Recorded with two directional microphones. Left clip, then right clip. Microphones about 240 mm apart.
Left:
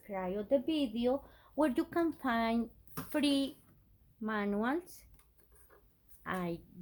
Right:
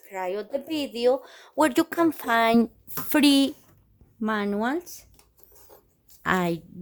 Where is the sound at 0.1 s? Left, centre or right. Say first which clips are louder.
Right 4 dB; right.